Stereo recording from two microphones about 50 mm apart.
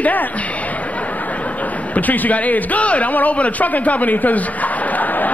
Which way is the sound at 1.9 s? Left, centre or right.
Left.